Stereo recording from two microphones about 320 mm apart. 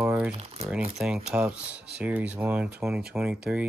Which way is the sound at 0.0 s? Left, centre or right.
Centre.